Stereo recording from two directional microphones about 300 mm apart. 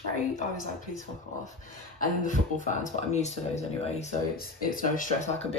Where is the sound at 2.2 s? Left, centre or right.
Left.